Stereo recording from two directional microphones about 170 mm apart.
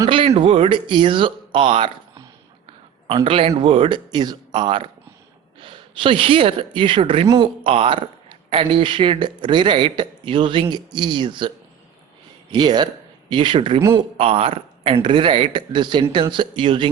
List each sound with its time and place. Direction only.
0.0 s speech: 30° right (ahead or behind)
3.1 s speech: 30° right (ahead or behind)